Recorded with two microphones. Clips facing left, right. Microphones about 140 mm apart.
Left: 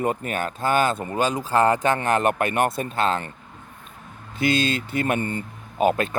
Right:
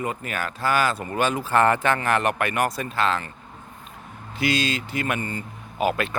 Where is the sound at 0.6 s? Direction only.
25° left (ahead or behind).